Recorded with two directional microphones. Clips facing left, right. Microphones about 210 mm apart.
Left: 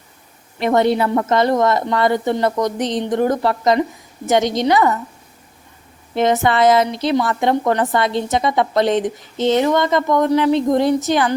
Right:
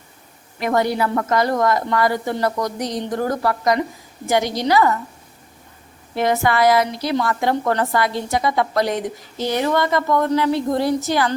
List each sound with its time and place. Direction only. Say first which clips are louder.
0.6 s a woman's voice: left 4 dB; 25° left (ahead or behind)
6.1 s a woman's voice: left 3 dB; 20° left (ahead or behind)